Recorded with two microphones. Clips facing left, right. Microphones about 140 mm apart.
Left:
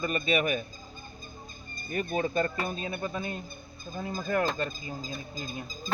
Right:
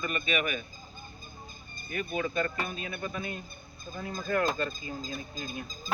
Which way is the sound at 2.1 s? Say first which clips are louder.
Left 2 dB; 35° left (ahead or behind).